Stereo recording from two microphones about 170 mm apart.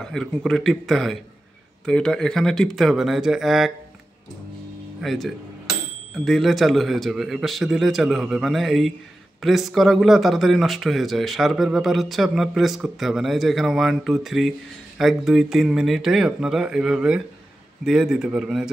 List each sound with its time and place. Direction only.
0.0 s a man's voice: centre (ahead or behind)
5.0 s a man's voice: centre (ahead or behind)